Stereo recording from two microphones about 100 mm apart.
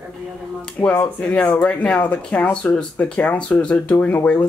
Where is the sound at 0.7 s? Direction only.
15° left (ahead or behind).